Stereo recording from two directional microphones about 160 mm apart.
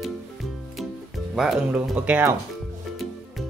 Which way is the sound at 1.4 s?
Centre (ahead or behind).